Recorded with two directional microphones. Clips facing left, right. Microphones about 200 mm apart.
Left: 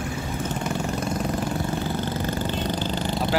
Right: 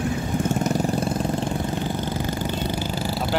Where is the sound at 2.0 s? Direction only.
15° right (ahead or behind).